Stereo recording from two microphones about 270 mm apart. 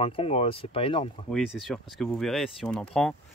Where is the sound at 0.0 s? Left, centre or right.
Left.